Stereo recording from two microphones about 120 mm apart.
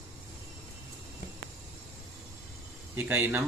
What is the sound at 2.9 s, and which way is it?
Speech, 15° right (ahead or behind).